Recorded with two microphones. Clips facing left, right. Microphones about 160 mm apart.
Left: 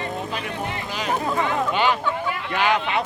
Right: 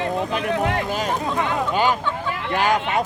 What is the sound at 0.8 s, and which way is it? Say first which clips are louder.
Speech: right 4 dB; 45° right (ahead or behind).